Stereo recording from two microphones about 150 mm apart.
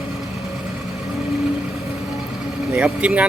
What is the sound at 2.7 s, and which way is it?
Speech, 10° right (ahead or behind).